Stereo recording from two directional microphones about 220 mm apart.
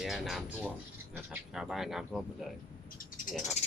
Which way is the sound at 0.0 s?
Centre (ahead or behind).